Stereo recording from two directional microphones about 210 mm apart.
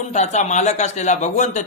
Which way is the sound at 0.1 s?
35° left (ahead or behind).